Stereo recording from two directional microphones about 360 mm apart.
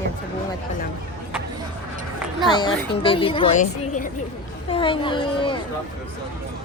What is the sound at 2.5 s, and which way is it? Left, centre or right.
A woman's voice, centre.